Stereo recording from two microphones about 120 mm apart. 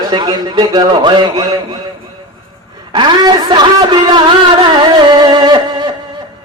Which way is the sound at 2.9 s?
35° right (ahead or behind).